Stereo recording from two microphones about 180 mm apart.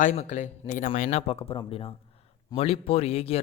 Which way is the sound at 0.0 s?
40° left (ahead or behind).